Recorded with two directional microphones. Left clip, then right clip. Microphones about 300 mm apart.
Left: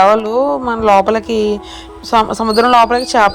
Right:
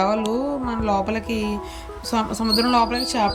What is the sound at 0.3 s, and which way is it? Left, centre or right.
Speech, left.